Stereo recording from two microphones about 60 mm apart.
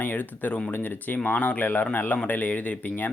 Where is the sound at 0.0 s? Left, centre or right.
Left.